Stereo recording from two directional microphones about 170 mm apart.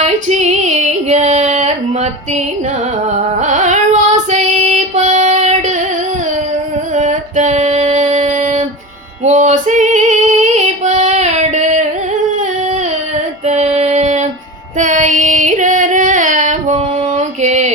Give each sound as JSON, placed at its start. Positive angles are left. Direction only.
{"t": 0.0, "sound": "female singing", "side_deg": -45}
{"t": 6.9, "sound": "female singing", "side_deg": -45}
{"t": 13.4, "sound": "female singing", "side_deg": -40}